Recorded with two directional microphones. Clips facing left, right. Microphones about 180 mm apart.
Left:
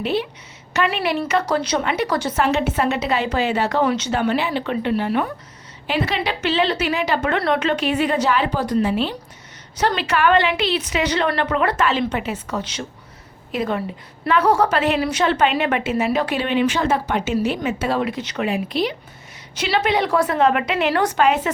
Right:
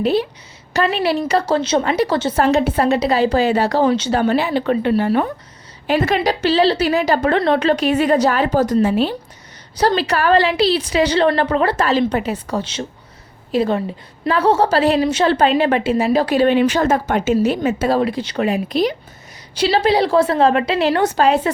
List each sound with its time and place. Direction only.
0.0 s a woman's voice: 35° right (ahead or behind)
2.4 s a woman's voice: 40° right (ahead or behind)